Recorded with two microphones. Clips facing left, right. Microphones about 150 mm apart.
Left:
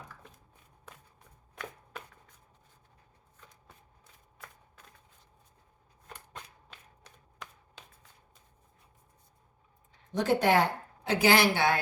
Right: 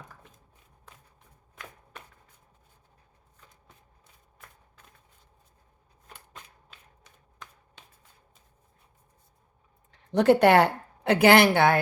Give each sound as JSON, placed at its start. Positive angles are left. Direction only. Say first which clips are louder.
{"t": 9.9, "sound": "speech", "louder": "right 8 dB", "side_deg": -65}